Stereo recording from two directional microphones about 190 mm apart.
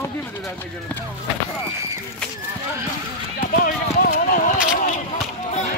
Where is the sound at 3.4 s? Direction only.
45° left (ahead or behind).